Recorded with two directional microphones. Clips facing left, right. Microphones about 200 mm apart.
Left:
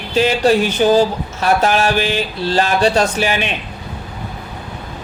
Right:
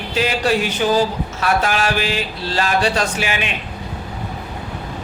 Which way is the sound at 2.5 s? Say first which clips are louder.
Left 4 dB; 35° left (ahead or behind).